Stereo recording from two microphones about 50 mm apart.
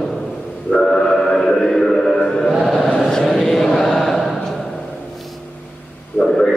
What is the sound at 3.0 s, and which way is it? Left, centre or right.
Chant, centre.